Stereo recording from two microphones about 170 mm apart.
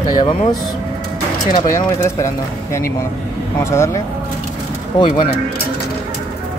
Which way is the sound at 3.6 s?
15° left (ahead or behind).